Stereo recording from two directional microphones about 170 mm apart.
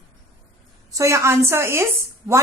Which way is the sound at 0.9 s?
15° right (ahead or behind).